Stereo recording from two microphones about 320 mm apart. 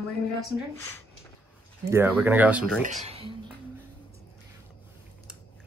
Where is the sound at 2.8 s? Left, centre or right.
Right.